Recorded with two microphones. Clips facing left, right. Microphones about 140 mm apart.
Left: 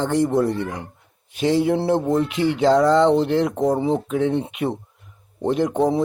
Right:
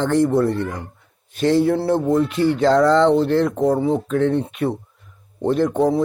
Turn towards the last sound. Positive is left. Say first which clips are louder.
# right 2 dB
turn(degrees=15)  # may be behind; listen again after turning